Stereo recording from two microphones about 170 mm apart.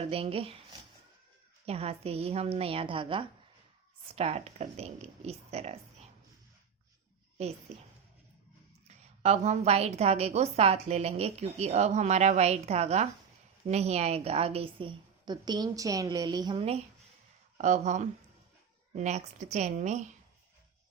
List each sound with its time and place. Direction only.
0.1 s a woman's voice: 35° right (ahead or behind)
1.6 s a woman's voice: 35° right (ahead or behind)
9.2 s a woman's voice: 40° right (ahead or behind)